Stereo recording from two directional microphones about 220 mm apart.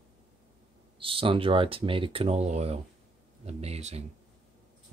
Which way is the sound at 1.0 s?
25° right (ahead or behind).